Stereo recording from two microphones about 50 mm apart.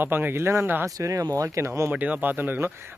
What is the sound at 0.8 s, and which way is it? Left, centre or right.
Speech, right.